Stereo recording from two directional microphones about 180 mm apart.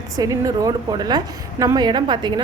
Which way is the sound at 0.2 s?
20° right (ahead or behind).